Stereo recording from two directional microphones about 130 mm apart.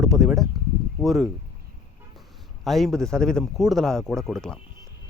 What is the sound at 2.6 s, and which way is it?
Speech, centre (ahead or behind).